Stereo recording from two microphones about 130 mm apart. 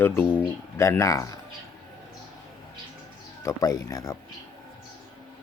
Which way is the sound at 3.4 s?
25° left (ahead or behind).